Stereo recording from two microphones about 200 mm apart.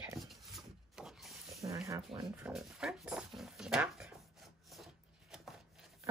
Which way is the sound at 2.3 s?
5° right (ahead or behind).